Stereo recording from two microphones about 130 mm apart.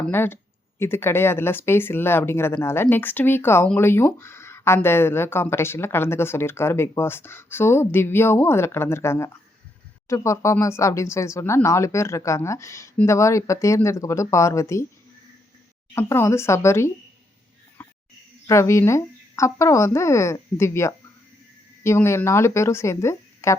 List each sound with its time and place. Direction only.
0.1 s speech: 15° left (ahead or behind)
16.0 s speech: 20° left (ahead or behind)
17.8 s a sound: 10° left (ahead or behind)
18.4 s speech: 20° left (ahead or behind)